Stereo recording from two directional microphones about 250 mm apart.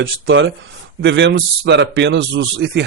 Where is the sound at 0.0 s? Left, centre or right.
Right.